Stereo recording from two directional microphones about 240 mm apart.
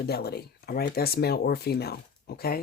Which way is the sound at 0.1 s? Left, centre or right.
Left.